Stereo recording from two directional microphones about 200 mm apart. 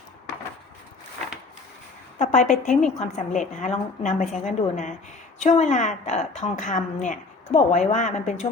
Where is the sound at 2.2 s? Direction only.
40° left (ahead or behind).